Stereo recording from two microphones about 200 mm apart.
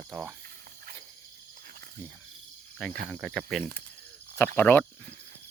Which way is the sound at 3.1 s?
Centre (ahead or behind).